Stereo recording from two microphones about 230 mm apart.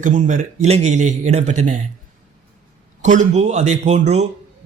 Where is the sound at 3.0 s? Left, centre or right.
Right.